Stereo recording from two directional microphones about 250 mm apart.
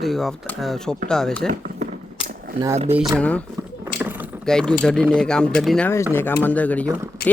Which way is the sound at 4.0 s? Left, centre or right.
Centre.